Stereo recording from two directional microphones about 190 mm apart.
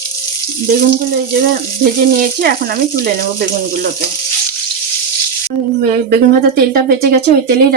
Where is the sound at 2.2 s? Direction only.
50° right (ahead or behind).